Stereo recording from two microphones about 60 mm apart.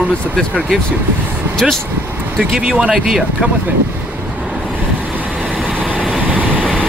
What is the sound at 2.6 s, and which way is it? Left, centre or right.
Speech, centre.